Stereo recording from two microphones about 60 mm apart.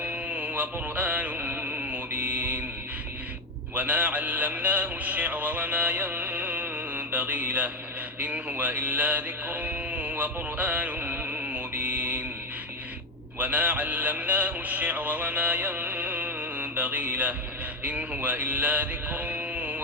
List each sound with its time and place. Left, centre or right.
0.0 s music: right
3.8 s music: right
8.2 s mantra: right
13.4 s music: right
17.8 s mantra: right